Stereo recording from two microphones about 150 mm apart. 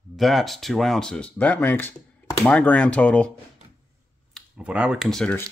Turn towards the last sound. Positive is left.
turn(degrees=5)  # may be behind; listen again after turning